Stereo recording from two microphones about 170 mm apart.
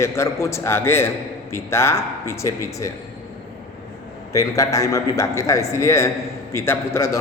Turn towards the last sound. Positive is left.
turn(degrees=15)  # may be behind; listen again after turning